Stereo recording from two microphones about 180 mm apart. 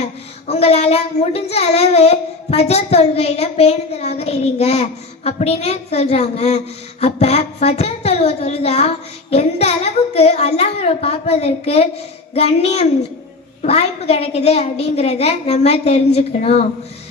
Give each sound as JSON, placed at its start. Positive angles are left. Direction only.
{"t": 0.0, "sound": "a child's voice", "side_deg": 35}